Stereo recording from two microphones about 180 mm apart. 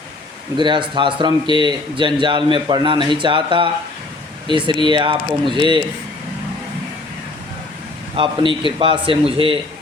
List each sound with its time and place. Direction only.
0.5 s speech: 25° right (ahead or behind)
8.1 s speech: 30° right (ahead or behind)